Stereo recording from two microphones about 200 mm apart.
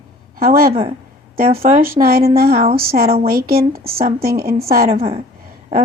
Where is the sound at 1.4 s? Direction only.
45° right (ahead or behind).